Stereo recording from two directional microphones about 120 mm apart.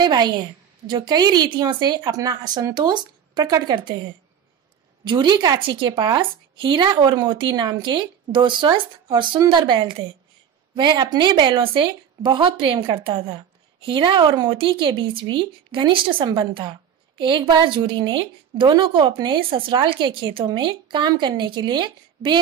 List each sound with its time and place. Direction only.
0.0 s a woman's voice: 35° right (ahead or behind)
5.0 s a woman's voice: 40° right (ahead or behind)